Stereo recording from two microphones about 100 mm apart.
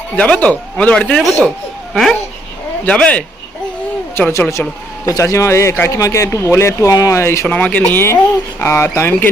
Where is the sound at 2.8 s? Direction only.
10° left (ahead or behind).